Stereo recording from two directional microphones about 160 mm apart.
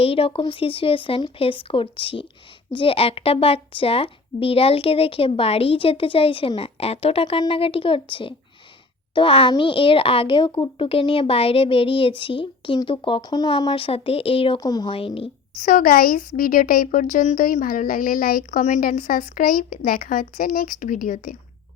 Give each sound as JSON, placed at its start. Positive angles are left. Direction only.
{"t": 0.0, "sound": "a woman's voice", "side_deg": 35}
{"t": 14.9, "sound": "a woman's voice", "side_deg": 35}
{"t": 15.6, "sound": "speech", "side_deg": 60}